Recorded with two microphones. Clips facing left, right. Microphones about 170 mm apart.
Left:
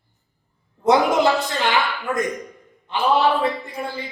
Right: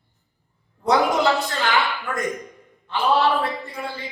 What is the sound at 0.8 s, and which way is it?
Speech, 20° left (ahead or behind).